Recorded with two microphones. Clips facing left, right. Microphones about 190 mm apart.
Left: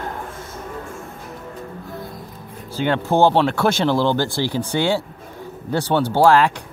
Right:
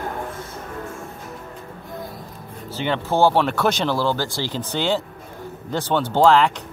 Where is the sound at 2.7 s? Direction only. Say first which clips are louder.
Left 3 dB; 10° left (ahead or behind).